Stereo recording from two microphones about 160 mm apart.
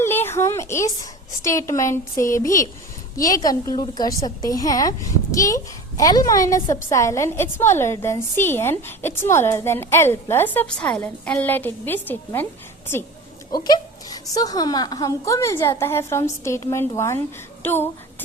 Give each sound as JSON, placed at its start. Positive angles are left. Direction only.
{"t": 0.0, "sound": "a sound", "side_deg": 15}
{"t": 1.4, "sound": "a woman's voice", "side_deg": 20}
{"t": 13.5, "sound": "a woman's voice", "side_deg": 25}